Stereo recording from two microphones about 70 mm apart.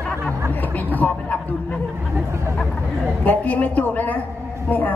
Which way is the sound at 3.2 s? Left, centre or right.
Left.